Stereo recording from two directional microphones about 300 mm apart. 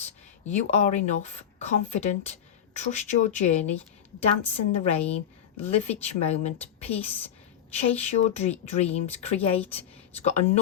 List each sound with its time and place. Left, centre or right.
0.5 s speech: left